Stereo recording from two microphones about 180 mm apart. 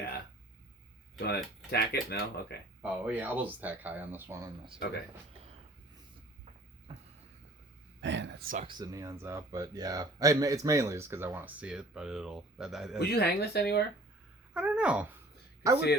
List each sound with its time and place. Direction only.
1.2 s speech: 60° left (ahead or behind)
2.8 s speech: 10° right (ahead or behind)
6.9 s a sound: 35° right (ahead or behind)
8.0 s a sound: 90° right
8.6 s speech: 20° right (ahead or behind); by 13.0 s centre (ahead or behind)
13.0 s speech: 65° left (ahead or behind)
14.5 s a child's voice: 5° right (ahead or behind)
15.6 s speech: 15° right (ahead or behind)